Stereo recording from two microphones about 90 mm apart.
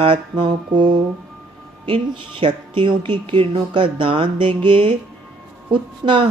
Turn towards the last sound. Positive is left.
turn(degrees=-90)